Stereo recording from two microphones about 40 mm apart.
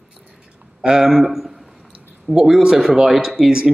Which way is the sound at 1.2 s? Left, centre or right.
Centre.